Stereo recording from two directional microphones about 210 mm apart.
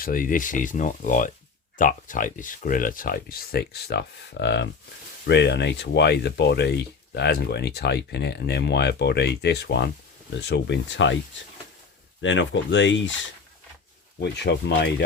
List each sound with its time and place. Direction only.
0.0 s speech: 40° left (ahead or behind); by 11.2 s 60° left (ahead or behind)
12.2 s speech: 60° left (ahead or behind)
14.2 s speech: 55° left (ahead or behind)